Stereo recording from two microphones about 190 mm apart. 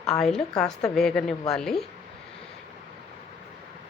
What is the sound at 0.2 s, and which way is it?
A woman's voice, centre (ahead or behind).